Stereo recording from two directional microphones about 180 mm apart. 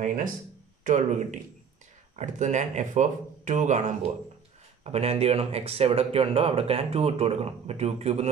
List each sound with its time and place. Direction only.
0.0 s speech: 45° right (ahead or behind)
2.1 s speech: 40° right (ahead or behind)
4.8 s speech: 35° right (ahead or behind)